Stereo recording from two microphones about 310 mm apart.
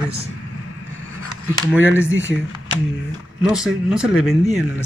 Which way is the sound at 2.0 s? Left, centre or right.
Right.